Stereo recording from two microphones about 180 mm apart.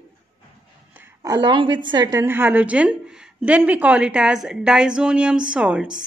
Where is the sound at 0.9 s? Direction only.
10° right (ahead or behind).